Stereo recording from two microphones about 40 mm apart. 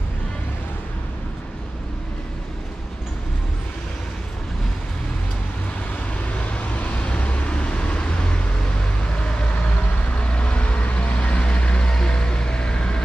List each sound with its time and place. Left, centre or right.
6.5 s vehicle: left
10.1 s vehicle: left